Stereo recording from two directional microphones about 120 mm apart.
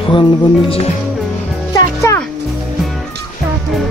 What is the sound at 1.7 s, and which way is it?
Music, 30° left (ahead or behind).